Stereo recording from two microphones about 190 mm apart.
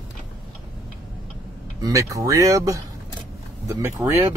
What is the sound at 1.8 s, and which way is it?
Speech, 20° right (ahead or behind).